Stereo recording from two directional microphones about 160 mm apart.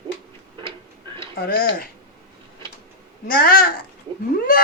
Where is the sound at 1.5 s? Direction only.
70° left (ahead or behind).